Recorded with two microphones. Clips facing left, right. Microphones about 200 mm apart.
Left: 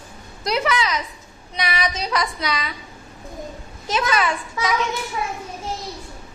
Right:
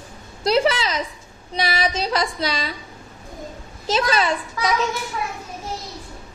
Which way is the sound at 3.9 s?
25° right (ahead or behind).